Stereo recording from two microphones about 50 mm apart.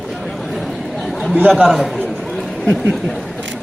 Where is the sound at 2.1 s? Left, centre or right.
Centre.